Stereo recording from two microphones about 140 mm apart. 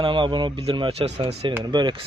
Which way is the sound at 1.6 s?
30° right (ahead or behind).